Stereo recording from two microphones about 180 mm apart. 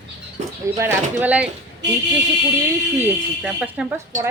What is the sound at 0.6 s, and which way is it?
Speech, 15° right (ahead or behind).